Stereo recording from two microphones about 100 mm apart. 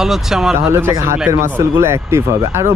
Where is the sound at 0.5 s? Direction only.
25° right (ahead or behind).